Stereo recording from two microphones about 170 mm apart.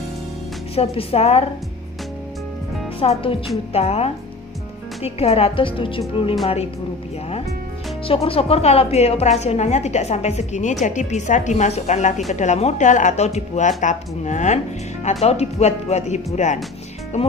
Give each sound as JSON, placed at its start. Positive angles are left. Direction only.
{"t": 0.7, "sound": "a woman's voice", "side_deg": 35}
{"t": 3.0, "sound": "a woman's voice", "side_deg": 35}
{"t": 8.1, "sound": "a woman's voice", "side_deg": 35}